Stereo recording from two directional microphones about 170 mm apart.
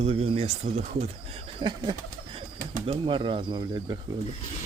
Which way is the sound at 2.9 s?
30° right (ahead or behind).